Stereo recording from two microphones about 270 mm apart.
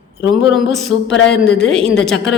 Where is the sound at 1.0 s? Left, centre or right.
Left.